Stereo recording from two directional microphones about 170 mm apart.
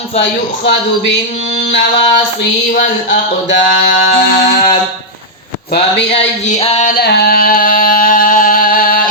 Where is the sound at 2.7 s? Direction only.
50° left (ahead or behind).